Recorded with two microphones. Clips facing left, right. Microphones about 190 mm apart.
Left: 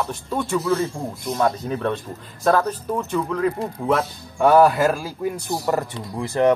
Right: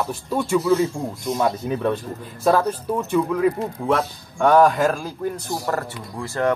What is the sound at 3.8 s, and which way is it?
Speech, 5° left (ahead or behind).